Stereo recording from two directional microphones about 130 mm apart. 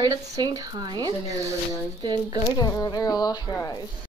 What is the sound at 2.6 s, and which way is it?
Speech, 30° left (ahead or behind).